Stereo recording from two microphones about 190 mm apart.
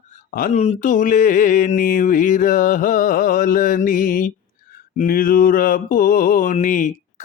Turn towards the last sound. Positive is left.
turn(degrees=40)  # may be behind; listen again after turning